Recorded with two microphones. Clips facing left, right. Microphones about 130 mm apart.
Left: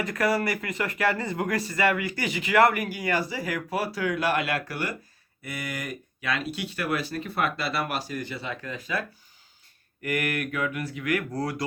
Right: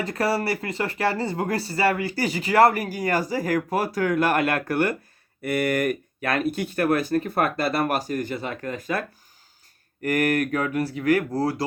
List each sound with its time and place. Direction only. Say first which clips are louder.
0.0 s speech: right 1 dB; 30° right (ahead or behind)